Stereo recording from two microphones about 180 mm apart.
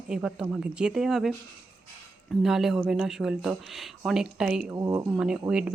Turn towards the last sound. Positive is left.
turn(degrees=-5)  # may be behind; listen again after turning